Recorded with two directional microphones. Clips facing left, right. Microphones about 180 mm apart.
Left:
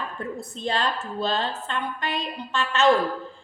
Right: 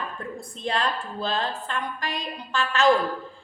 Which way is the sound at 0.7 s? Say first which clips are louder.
Even; 30° left (ahead or behind).